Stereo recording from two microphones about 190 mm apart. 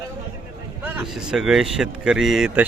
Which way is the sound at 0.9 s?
5° right (ahead or behind).